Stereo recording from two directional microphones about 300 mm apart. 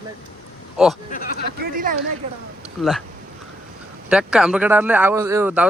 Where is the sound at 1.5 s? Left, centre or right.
Right.